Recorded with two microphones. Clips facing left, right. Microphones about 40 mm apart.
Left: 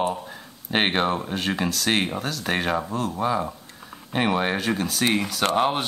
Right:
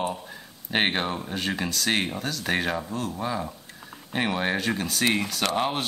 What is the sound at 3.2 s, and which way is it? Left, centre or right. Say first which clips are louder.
A man's voice: left 5 dB; centre.